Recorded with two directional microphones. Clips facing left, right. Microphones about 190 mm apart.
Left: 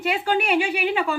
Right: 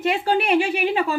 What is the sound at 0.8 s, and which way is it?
Speech, 35° right (ahead or behind).